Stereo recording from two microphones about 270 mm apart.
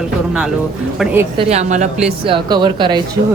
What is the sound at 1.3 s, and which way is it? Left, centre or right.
Speech, right.